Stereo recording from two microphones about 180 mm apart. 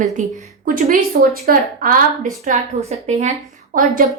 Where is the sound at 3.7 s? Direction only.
50° right (ahead or behind).